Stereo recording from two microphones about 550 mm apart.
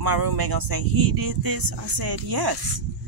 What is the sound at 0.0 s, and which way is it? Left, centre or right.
Speech, right.